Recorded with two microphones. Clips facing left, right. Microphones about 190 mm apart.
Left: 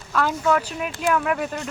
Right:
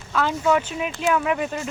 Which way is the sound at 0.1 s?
Centre (ahead or behind).